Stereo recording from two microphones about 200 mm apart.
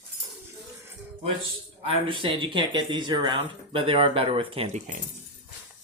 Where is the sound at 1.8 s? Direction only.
25° right (ahead or behind).